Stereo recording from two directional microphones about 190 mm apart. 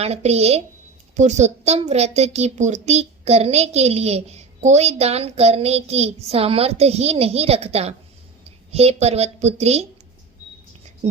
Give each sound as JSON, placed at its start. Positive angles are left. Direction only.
{"t": 0.0, "sound": "a woman's voice", "side_deg": -35}